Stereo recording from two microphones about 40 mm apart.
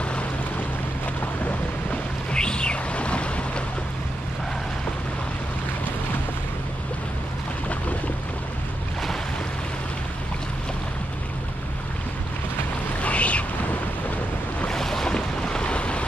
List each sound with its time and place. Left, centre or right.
2.3 s a sound: left
13.0 s boat: left
14.7 s boat: centre; by 16.1 s left